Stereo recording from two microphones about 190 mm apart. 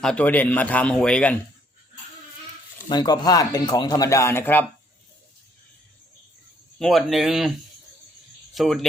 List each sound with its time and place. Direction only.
0.0 s speech: 5° left (ahead or behind)
2.9 s speech: 20° left (ahead or behind)
6.7 s speech: centre (ahead or behind)
8.5 s speech: centre (ahead or behind)